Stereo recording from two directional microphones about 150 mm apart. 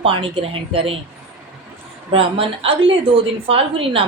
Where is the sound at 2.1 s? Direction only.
40° right (ahead or behind).